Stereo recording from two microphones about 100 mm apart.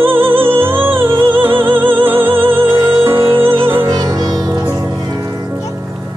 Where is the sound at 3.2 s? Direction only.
60° right (ahead or behind).